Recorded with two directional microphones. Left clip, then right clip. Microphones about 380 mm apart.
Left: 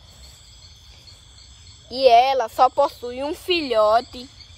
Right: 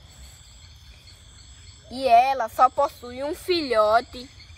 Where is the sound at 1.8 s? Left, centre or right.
Left.